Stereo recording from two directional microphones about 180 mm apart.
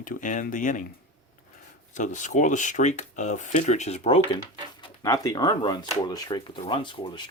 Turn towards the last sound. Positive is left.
turn(degrees=25)  # may be behind; listen again after turning